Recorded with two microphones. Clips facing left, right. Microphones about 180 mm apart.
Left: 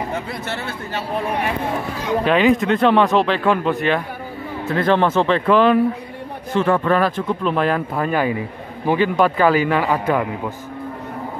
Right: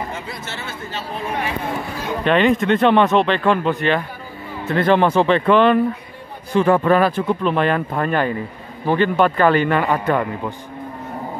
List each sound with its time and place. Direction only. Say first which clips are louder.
0.1 s speech: left 4 dB; 60° left (ahead or behind)
2.2 s a man's voice: right 1 dB; 5° left (ahead or behind)
5.3 s speech: even; centre (ahead or behind)
6.5 s a man's voice: right 2 dB; 10° right (ahead or behind); by 10.5 s 5° left (ahead or behind)